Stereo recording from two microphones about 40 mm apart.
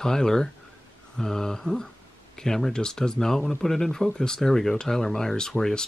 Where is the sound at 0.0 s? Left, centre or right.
Centre.